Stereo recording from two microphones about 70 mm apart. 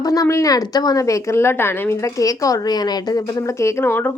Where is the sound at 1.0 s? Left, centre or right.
Left.